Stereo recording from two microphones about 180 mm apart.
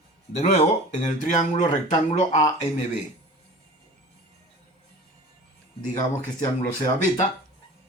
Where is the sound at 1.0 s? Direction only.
45° left (ahead or behind).